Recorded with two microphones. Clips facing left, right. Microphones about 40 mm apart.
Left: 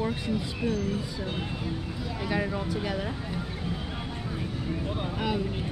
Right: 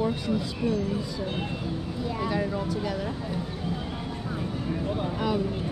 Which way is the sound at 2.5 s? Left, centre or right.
Centre.